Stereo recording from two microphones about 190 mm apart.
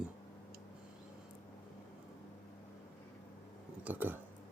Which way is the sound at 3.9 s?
10° right (ahead or behind).